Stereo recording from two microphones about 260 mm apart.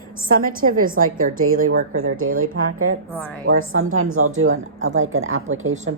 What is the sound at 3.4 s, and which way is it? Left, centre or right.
A woman's voice, right.